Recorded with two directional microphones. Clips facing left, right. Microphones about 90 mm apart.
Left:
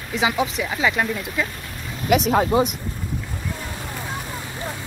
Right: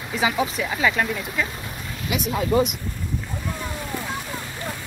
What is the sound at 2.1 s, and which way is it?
Speech, 55° left (ahead or behind).